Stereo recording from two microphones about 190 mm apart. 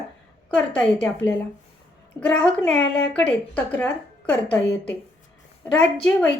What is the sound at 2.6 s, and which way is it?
A woman's voice, 10° left (ahead or behind).